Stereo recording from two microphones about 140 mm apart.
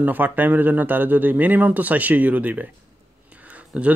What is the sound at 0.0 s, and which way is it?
Speech, 15° right (ahead or behind).